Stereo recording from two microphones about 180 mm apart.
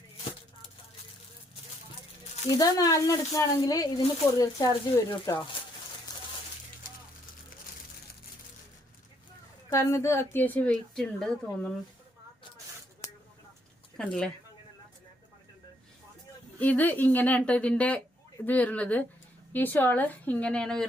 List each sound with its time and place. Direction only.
2.6 s speech: 20° left (ahead or behind)
9.6 s a woman's voice: 15° left (ahead or behind)
13.9 s speech: 5° left (ahead or behind)
16.6 s a woman's voice: 10° left (ahead or behind)